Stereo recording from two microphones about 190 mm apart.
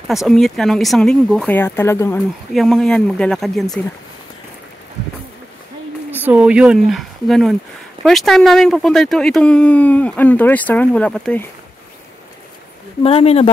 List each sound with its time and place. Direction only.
0.1 s speech: centre (ahead or behind)
2.5 s speech: centre (ahead or behind)
6.2 s speech: 5° right (ahead or behind)
13.0 s speech: 30° left (ahead or behind)